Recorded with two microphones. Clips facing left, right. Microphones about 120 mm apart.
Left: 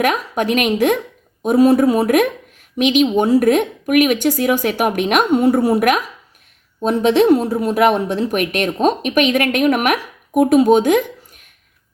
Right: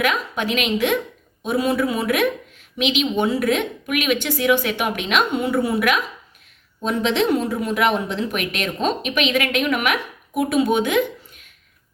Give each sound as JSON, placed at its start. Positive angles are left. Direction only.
{"t": 0.0, "sound": "speech", "side_deg": 45}